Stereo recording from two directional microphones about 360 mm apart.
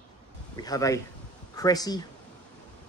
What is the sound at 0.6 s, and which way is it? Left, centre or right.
Speech, centre.